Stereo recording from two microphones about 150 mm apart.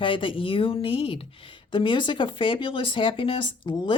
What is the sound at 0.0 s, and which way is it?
Speech, 35° left (ahead or behind).